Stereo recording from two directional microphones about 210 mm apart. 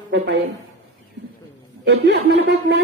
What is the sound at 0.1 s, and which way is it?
Speech, 55° right (ahead or behind).